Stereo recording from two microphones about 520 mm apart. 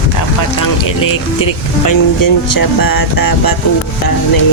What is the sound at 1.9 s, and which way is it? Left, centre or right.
Speech, left.